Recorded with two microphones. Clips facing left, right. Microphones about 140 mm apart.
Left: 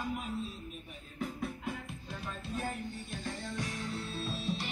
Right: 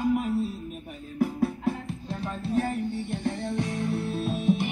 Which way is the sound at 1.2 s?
70° right (ahead or behind).